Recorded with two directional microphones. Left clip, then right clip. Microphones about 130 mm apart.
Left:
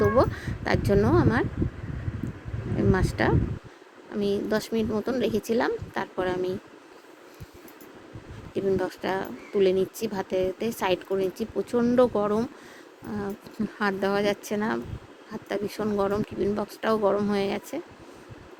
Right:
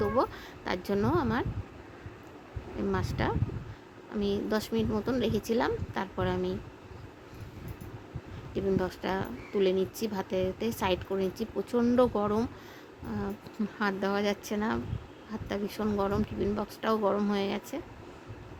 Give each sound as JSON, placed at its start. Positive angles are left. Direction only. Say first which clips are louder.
{"t": 0.0, "sound": "speech", "louder": "left 6 dB", "side_deg": 15}
{"t": 2.7, "sound": "speech", "louder": "left 7 dB", "side_deg": 20}
{"t": 8.5, "sound": "speech", "louder": "left 4 dB", "side_deg": 15}